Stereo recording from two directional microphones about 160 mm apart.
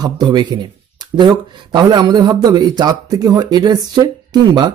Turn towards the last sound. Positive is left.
turn(degrees=-25)  # may be behind; listen again after turning